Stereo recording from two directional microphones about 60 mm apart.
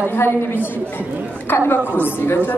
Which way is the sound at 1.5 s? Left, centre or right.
Left.